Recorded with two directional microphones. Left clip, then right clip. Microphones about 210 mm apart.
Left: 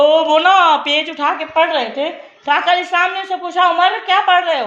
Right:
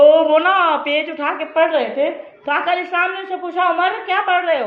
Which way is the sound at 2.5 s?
40° left (ahead or behind).